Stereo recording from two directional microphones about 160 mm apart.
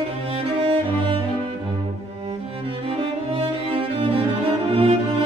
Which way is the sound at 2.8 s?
35° right (ahead or behind).